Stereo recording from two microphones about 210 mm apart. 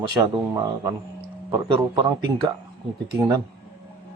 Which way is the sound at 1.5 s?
25° right (ahead or behind).